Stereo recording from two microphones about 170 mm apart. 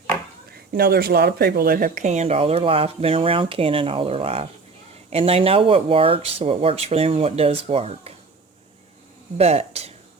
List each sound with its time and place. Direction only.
0.7 s speech: 65° right (ahead or behind); by 8.1 s 35° right (ahead or behind)
9.4 s speech: 40° right (ahead or behind)